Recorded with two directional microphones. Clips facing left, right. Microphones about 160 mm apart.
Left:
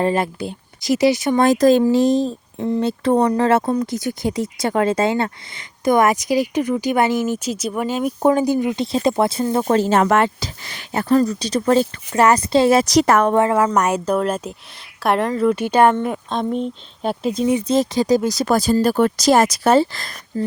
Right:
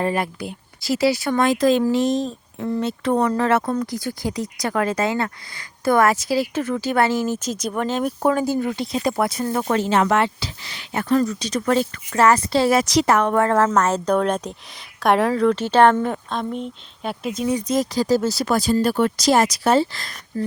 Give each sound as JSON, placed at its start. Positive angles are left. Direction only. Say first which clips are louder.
{"t": 0.0, "sound": "speech", "louder": "left 4 dB", "side_deg": 25}
{"t": 1.4, "sound": "speech", "louder": "left 4 dB", "side_deg": 40}
{"t": 8.2, "sound": "speech", "louder": "left 5 dB", "side_deg": 20}
{"t": 12.1, "sound": "speech", "louder": "left 2 dB", "side_deg": 20}
{"t": 12.8, "sound": "speech", "louder": "left 4 dB", "side_deg": 40}
{"t": 13.1, "sound": "speech", "louder": "left 3 dB", "side_deg": 50}
{"t": 13.7, "sound": "speech", "louder": "left 1 dB", "side_deg": 15}
{"t": 16.5, "sound": "speech", "louder": "left 6 dB", "side_deg": 35}
{"t": 18.4, "sound": "speech", "louder": "left 3 dB", "side_deg": 45}